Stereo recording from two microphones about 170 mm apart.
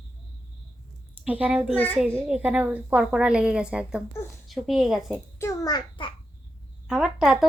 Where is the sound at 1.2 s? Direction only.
10° right (ahead or behind).